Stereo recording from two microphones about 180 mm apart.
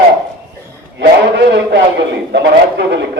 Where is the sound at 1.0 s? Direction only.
70° right (ahead or behind).